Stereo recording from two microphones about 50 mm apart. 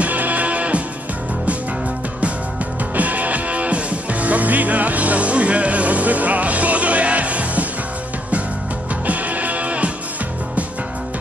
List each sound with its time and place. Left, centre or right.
0.0 s music: right
3.0 s music: right
9.0 s music: right